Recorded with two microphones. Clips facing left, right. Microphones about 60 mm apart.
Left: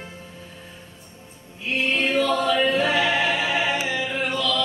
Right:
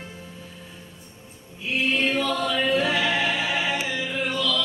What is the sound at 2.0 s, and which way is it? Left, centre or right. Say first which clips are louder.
Chant: left 3 dB; centre.